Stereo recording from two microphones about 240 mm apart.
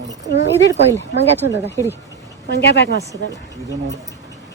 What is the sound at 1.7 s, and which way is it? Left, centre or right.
Speech, centre.